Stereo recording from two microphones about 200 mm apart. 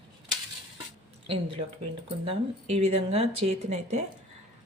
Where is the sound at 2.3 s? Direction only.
30° right (ahead or behind).